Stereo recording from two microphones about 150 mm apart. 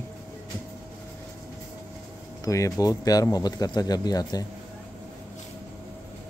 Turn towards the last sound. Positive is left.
turn(degrees=25)  # may be behind; listen again after turning